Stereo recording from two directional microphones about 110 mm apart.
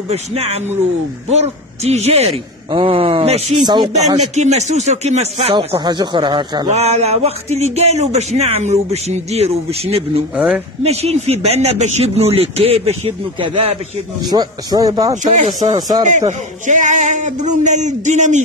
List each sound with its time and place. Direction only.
0.1 s speech: 70° right (ahead or behind)
1.3 s speech: 85° right
2.7 s speech: 50° right (ahead or behind)
3.6 s a man's voice: 40° right (ahead or behind)
4.2 s speech: 90° right; by 6.7 s 45° right (ahead or behind)
6.7 s speech: 80° right
10.3 s speech: 10° right (ahead or behind)
10.8 s speech: 70° right (ahead or behind)
14.2 s a man's voice: 40° right (ahead or behind)
15.2 s speech: 90° right
16.8 s speech: 90° right